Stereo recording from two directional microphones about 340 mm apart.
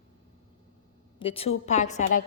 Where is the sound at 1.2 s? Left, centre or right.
Centre.